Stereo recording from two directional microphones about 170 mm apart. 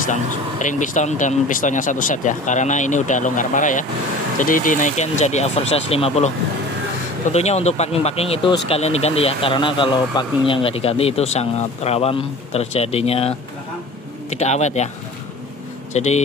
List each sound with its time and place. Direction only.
0.1 s speech: 45° left (ahead or behind)
7.3 s speech: 40° left (ahead or behind)
14.3 s speech: 40° left (ahead or behind)
15.9 s speech: 40° left (ahead or behind)